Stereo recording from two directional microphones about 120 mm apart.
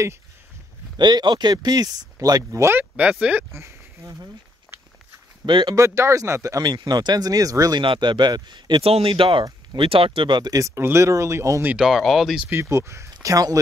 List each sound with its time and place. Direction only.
0.9 s speech: 40° right (ahead or behind); by 3.4 s 10° right (ahead or behind)
3.5 s a sound: 25° right (ahead or behind)
5.4 s speech: 40° right (ahead or behind)
5.8 s speech: 25° right (ahead or behind)
7.8 s speech: 45° right (ahead or behind)
8.8 s speech: 55° right (ahead or behind)
9.4 s speech: 35° right (ahead or behind)
9.8 s speech: 50° right (ahead or behind); by 11.7 s 25° right (ahead or behind)
11.7 s speech: centre (ahead or behind)
12.4 s speech: 20° right (ahead or behind)